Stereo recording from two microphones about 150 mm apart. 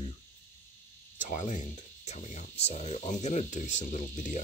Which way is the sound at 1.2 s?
55° left (ahead or behind).